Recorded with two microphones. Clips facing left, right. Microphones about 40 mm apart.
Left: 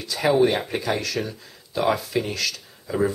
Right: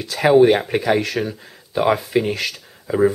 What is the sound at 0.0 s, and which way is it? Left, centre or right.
Speech, right.